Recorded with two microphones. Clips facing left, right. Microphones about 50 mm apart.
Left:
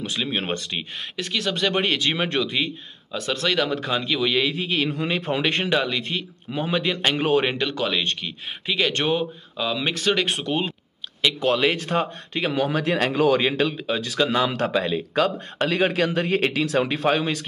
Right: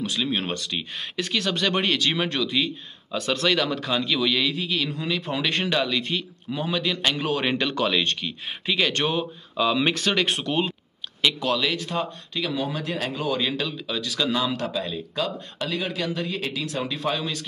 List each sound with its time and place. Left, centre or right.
0.0 s speech: centre
1.1 s speech: centre; by 2.7 s left
3.1 s speech: centre
3.6 s a man's voice: centre
7.4 s speech: centre
9.6 s speech: centre
11.3 s speech: left
12.5 s speech: left
13.4 s speech: left